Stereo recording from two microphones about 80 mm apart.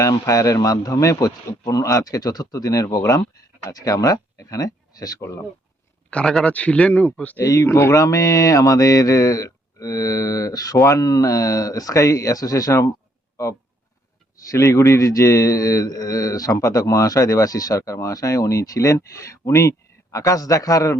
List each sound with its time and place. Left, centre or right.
0.0 s a man's voice: left
5.2 s speech: left
6.1 s speech: centre
7.4 s a man's voice: left